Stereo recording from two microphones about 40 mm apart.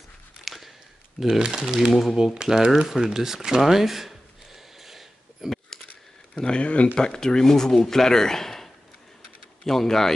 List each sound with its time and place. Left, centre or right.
0.5 s a sound: centre
1.4 s speech: centre
4.7 s a sound: centre
6.3 s speech: left
7.0 s speech: centre
9.7 s speech: centre